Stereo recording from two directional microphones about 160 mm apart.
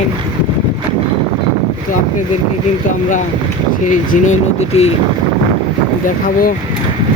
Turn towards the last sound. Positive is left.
turn(degrees=60)  # may be behind; listen again after turning